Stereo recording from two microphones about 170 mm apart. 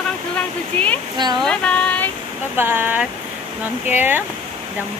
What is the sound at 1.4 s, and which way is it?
Speech, 5° left (ahead or behind).